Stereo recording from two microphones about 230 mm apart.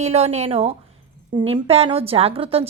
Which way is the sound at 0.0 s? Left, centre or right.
Right.